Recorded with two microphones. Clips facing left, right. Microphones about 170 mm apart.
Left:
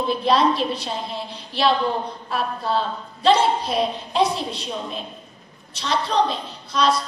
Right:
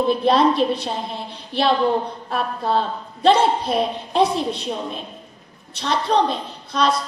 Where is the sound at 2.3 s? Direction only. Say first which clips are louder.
Right 2 dB; 50° right (ahead or behind).